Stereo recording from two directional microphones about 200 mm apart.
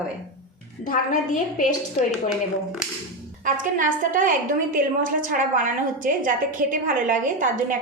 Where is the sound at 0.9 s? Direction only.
40° left (ahead or behind).